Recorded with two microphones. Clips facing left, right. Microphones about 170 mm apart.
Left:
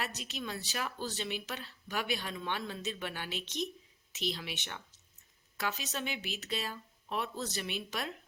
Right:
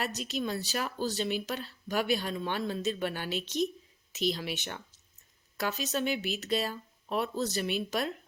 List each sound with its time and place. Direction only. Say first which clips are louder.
0.3 s speech: right 7 dB; 40° right (ahead or behind)